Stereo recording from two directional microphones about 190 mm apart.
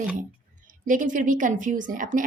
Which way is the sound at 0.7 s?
45° right (ahead or behind).